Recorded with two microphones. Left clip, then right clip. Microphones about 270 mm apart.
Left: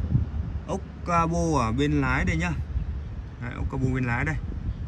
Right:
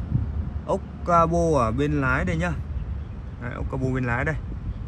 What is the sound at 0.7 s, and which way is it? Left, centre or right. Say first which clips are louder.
Speech: right 5 dB; centre.